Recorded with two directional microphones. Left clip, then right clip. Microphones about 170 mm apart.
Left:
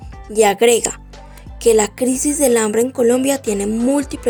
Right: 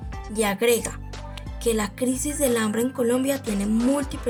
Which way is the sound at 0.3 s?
45° left (ahead or behind).